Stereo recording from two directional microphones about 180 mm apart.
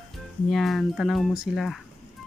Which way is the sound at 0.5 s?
Centre (ahead or behind).